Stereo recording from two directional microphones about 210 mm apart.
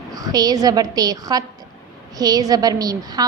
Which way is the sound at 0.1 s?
15° right (ahead or behind).